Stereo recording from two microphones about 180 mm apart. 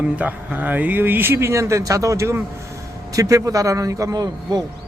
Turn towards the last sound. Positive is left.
turn(degrees=-20)  # may be behind; listen again after turning